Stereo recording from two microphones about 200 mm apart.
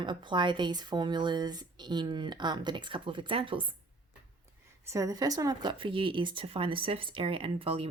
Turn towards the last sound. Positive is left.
turn(degrees=-25)  # may be behind; listen again after turning